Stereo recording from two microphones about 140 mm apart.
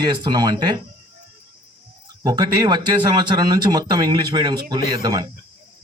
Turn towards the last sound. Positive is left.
turn(degrees=-30)  # may be behind; listen again after turning